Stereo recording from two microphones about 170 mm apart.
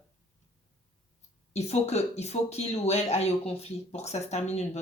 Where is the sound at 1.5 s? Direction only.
40° left (ahead or behind).